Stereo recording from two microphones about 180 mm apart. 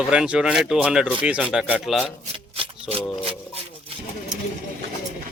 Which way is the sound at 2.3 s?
30° right (ahead or behind).